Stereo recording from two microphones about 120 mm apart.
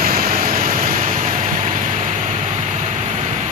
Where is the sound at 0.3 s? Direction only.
90° right.